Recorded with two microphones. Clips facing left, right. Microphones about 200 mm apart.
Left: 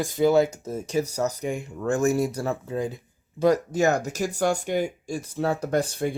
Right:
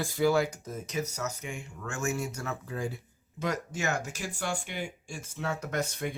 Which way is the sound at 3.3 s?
35° left (ahead or behind).